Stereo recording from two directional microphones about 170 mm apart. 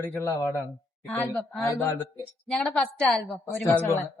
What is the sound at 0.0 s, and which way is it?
A man's voice, 15° left (ahead or behind).